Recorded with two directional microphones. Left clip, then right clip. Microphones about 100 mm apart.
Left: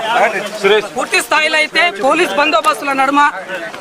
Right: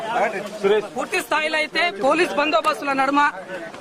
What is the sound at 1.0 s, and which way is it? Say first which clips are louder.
Speech: left 9 dB; 15° right (ahead or behind).